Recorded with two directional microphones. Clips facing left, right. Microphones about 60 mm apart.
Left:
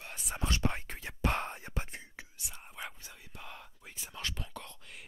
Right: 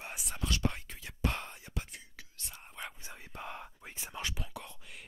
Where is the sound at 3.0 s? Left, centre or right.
Right.